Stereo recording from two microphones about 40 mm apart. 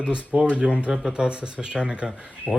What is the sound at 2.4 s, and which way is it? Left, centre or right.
Speech, right.